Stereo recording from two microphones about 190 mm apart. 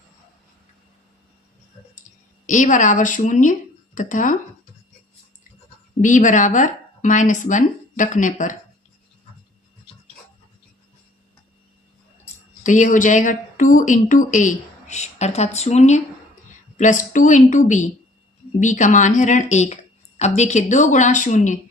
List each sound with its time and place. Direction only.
2.5 s speech: 40° left (ahead or behind)
6.0 s speech: 40° left (ahead or behind)
12.6 s speech: 40° left (ahead or behind)